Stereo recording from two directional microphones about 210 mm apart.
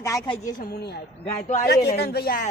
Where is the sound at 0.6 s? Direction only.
45° left (ahead or behind).